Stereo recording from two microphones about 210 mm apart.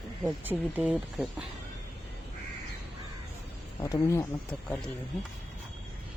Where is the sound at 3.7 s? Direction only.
15° left (ahead or behind).